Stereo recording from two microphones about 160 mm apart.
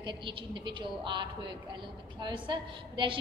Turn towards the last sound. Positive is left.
turn(degrees=-30)  # may be behind; listen again after turning